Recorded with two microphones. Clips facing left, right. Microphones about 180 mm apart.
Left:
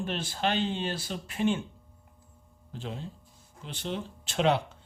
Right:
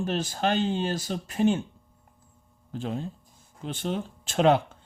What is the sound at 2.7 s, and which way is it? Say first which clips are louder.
A man's voice: right 7 dB; 50° right (ahead or behind).